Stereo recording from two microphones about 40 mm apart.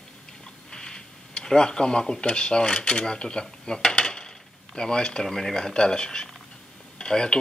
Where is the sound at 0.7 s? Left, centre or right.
Centre.